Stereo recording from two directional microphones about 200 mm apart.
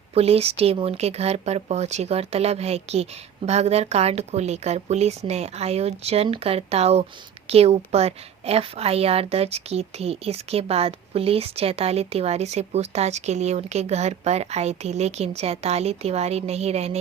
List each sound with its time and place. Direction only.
0.1 s a woman's voice: 30° right (ahead or behind)